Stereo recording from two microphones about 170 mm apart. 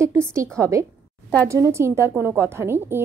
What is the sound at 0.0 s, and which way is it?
A woman's voice, 15° right (ahead or behind).